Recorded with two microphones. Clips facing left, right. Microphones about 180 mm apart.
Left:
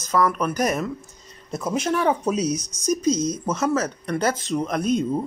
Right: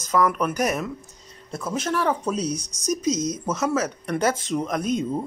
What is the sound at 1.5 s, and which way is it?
Speech, 15° left (ahead or behind).